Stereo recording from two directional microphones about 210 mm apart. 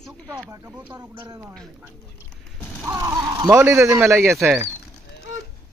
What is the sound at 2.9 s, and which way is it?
Speech, 15° right (ahead or behind).